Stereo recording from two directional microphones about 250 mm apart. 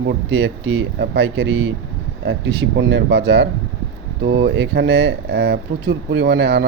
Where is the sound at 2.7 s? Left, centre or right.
Right.